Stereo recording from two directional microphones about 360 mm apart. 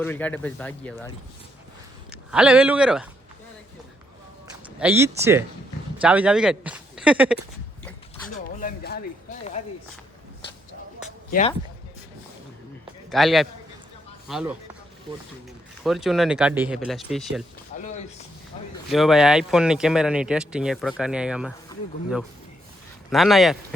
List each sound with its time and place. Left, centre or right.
0.0 s speech: centre
2.3 s speech: centre
4.8 s speech: centre
8.3 s a sound: left
11.3 s speech: left
13.1 s a man's voice: centre
15.8 s speech: centre
17.7 s a sound: left
18.9 s speech: centre
23.1 s speech: centre